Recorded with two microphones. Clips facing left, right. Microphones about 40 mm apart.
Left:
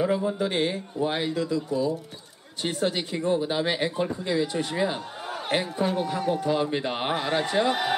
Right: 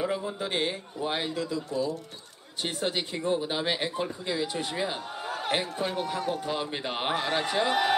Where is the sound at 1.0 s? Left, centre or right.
Centre.